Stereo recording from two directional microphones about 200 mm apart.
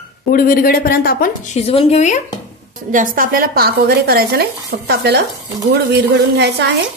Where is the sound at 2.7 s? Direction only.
40° right (ahead or behind).